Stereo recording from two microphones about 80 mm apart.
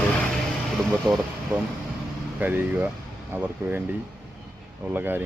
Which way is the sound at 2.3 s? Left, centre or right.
Right.